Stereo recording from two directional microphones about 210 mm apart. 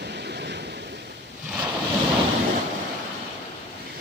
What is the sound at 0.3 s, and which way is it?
Waves, 55° right (ahead or behind).